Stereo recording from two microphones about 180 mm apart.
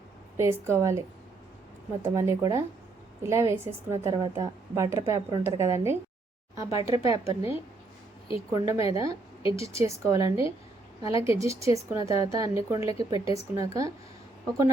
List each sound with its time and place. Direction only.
0.3 s a woman's voice: 15° right (ahead or behind)
8.5 s a woman's voice: 20° right (ahead or behind)